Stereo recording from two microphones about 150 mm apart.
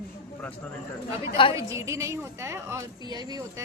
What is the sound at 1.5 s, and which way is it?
A woman's voice, 20° right (ahead or behind).